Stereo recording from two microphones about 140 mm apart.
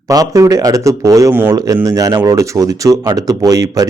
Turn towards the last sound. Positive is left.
turn(degrees=-25)  # may be behind; listen again after turning